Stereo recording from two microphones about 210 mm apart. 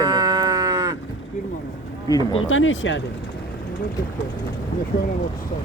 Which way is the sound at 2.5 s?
65° left (ahead or behind).